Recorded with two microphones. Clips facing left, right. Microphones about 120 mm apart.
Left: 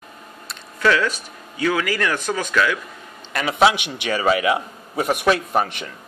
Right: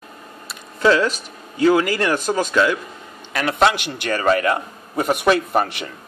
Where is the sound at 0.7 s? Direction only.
30° right (ahead or behind).